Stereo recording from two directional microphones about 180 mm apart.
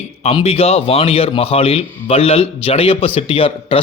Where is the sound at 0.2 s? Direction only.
35° left (ahead or behind).